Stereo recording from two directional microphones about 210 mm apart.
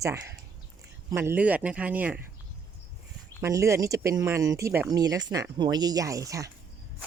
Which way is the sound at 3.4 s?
15° right (ahead or behind).